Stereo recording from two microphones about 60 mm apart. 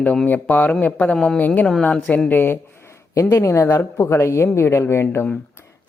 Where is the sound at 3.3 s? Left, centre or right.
Left.